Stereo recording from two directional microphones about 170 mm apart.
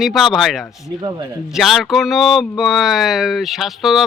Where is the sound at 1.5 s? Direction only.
Centre (ahead or behind).